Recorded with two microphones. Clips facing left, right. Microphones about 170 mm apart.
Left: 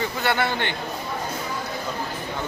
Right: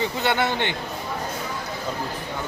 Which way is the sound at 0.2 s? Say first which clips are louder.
Even; 20° right (ahead or behind).